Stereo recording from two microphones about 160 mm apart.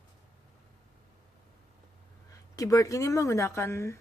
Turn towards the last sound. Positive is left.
turn(degrees=15)  # may be behind; listen again after turning